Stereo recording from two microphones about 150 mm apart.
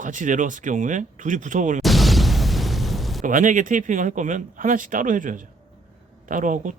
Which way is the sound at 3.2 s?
60° right (ahead or behind).